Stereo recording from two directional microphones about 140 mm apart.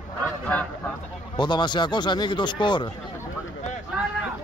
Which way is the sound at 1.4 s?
30° left (ahead or behind).